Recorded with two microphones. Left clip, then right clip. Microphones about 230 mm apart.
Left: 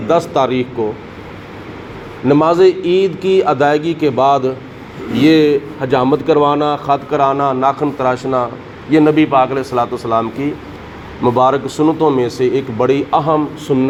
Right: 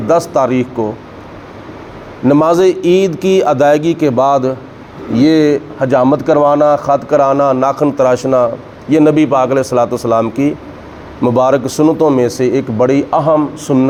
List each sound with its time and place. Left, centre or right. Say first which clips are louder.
0.1 s a man's voice: right 2 dB; right
2.2 s a man's voice: right 1 dB; right